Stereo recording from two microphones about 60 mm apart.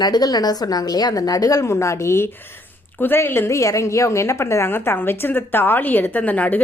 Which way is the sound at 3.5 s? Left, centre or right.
Left.